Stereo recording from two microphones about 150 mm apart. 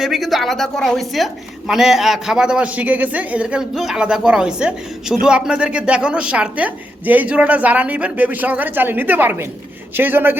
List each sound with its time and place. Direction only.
0.0 s a woman's voice: centre (ahead or behind)